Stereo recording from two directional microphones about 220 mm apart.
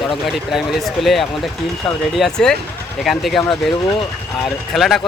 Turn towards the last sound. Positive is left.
turn(degrees=0)  # may be behind; listen again after turning